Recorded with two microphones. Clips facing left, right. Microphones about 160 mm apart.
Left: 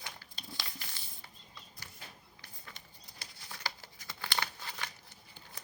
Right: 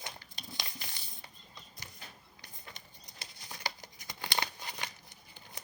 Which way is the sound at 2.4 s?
20° right (ahead or behind).